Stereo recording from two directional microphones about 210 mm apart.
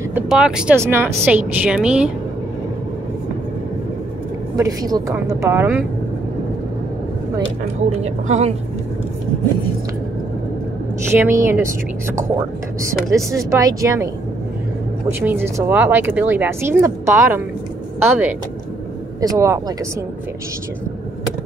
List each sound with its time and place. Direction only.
0.1 s speech: 5° right (ahead or behind)
4.6 s speech: 15° right (ahead or behind)
8.0 s a woman's voice: 30° right (ahead or behind)
11.1 s speech: 10° right (ahead or behind)
12.8 s speech: 15° right (ahead or behind)
15.0 s a woman's voice: 10° right (ahead or behind)